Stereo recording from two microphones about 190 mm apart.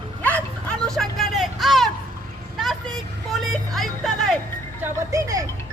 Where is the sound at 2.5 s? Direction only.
Centre (ahead or behind).